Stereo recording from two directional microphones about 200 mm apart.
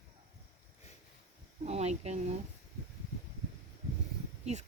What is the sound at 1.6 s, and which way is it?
Speech, 35° right (ahead or behind).